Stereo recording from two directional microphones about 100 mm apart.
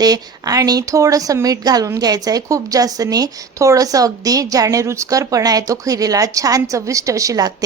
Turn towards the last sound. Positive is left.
turn(degrees=-35)  # may be behind; listen again after turning